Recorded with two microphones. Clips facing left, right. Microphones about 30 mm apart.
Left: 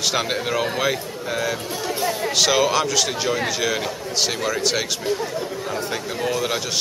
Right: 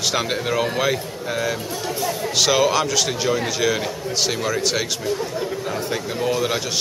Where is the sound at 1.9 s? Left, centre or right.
Centre.